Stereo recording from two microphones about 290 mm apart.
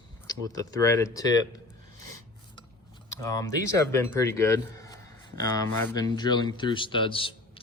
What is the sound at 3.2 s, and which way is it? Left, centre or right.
Speech, centre.